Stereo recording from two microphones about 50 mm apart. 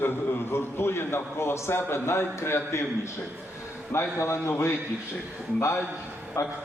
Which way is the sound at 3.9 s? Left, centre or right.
Left.